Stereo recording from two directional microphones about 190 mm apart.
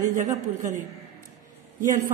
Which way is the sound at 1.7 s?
45° right (ahead or behind).